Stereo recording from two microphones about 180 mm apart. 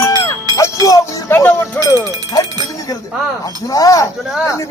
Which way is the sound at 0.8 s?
20° left (ahead or behind).